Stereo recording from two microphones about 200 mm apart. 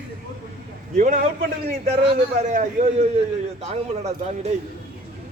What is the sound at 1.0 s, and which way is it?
A man's voice, 40° right (ahead or behind).